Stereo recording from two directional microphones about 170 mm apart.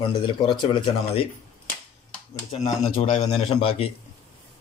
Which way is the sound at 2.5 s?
40° left (ahead or behind).